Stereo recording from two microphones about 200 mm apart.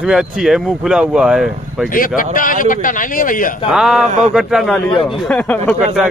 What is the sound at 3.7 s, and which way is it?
Speech, 5° right (ahead or behind).